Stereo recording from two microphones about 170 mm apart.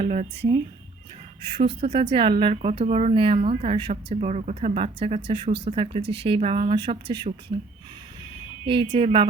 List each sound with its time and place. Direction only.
0.0 s speech: 45° right (ahead or behind)
1.5 s speech: 30° right (ahead or behind)
8.6 s speech: 30° right (ahead or behind)